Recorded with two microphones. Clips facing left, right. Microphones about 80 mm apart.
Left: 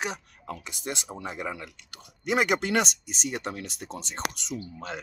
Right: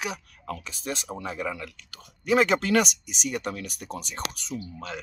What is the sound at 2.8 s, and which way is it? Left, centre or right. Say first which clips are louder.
Speech: right 2 dB; left.